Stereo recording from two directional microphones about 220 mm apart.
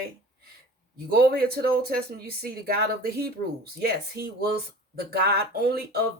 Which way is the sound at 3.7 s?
45° right (ahead or behind).